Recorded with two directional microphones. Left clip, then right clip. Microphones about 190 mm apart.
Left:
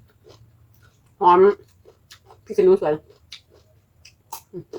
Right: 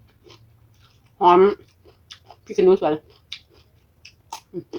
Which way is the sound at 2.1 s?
20° right (ahead or behind).